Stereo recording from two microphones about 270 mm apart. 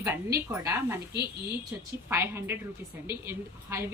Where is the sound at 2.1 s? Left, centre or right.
Centre.